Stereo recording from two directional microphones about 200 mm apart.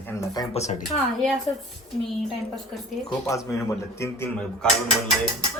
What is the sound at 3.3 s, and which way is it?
A man's voice, 15° left (ahead or behind).